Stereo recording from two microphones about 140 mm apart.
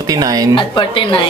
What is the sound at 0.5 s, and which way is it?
Speech, 40° left (ahead or behind).